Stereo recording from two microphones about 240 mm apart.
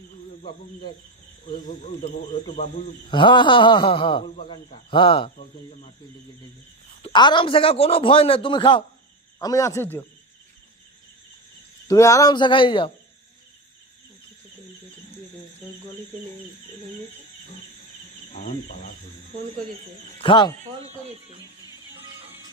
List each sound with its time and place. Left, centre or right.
0.4 s speech: centre
7.0 s speech: centre
11.9 s speech: centre
20.1 s speech: centre
20.8 s speech: right